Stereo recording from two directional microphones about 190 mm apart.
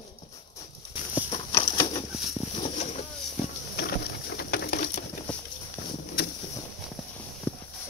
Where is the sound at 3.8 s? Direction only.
60° left (ahead or behind).